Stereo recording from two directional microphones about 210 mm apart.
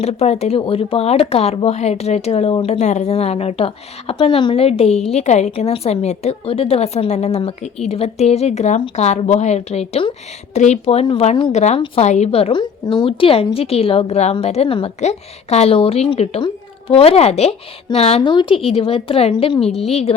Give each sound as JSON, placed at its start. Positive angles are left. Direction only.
{"t": 0.0, "sound": "speech", "side_deg": 30}